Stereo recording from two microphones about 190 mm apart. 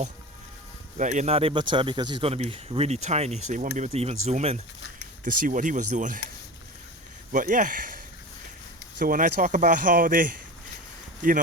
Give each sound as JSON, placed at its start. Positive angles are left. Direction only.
{"t": 0.9, "sound": "speech", "side_deg": -40}
{"t": 7.3, "sound": "speech", "side_deg": -45}